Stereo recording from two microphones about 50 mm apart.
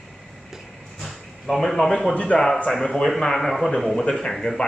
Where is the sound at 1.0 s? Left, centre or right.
Centre.